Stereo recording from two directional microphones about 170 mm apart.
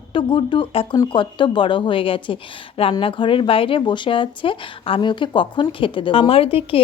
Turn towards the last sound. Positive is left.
turn(degrees=35)  # may be behind; listen again after turning